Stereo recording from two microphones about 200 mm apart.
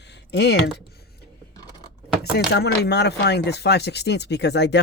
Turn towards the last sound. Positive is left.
turn(degrees=60)  # may be behind; listen again after turning